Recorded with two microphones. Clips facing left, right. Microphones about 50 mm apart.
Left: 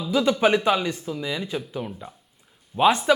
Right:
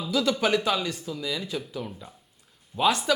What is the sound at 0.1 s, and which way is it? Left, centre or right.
Speech, left.